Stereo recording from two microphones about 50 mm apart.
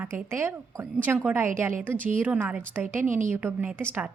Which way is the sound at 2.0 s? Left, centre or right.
Right.